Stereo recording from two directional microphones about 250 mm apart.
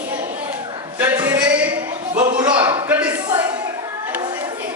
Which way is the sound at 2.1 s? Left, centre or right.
Right.